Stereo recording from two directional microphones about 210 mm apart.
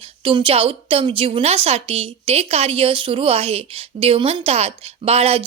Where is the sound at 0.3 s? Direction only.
25° right (ahead or behind).